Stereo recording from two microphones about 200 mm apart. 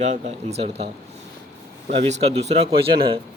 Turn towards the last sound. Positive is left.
turn(degrees=-25)  # may be behind; listen again after turning